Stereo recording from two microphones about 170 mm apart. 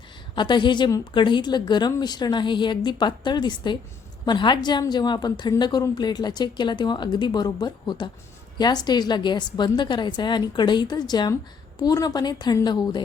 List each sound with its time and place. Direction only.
0.3 s a woman's voice: 25° left (ahead or behind)